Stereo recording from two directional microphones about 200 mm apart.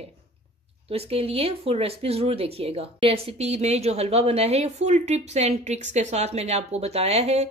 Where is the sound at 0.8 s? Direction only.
30° right (ahead or behind).